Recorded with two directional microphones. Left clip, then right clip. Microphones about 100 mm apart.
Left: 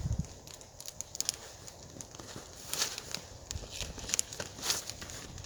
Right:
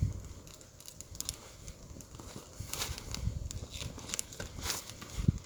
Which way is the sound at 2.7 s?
30° right (ahead or behind).